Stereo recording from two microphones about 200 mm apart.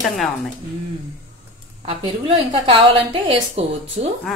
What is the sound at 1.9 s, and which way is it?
A woman's voice, 30° right (ahead or behind).